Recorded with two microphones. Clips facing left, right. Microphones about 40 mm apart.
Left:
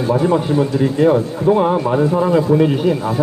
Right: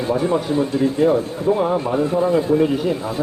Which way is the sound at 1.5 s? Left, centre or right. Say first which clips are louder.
Left 4 dB; left.